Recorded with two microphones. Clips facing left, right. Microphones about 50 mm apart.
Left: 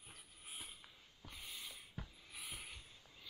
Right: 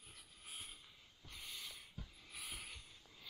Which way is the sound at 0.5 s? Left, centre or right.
Centre.